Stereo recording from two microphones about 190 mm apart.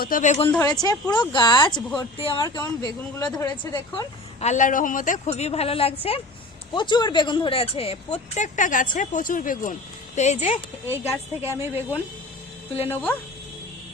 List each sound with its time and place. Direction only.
0.0 s a woman's voice: 45° left (ahead or behind)
0.4 s speech: 15° left (ahead or behind)
4.4 s a woman's voice: 40° left (ahead or behind)
8.4 s a woman's voice: 40° left (ahead or behind)
11.4 s speech: 10° right (ahead or behind)
12.9 s speech: 10° left (ahead or behind)